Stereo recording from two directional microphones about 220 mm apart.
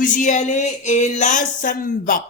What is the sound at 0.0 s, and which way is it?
Speech, 35° left (ahead or behind).